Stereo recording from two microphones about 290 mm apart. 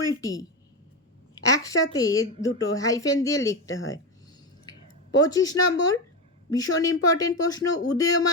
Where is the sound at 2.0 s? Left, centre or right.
Centre.